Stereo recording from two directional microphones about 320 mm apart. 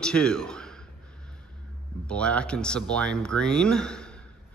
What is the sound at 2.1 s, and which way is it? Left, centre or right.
A man's voice, centre.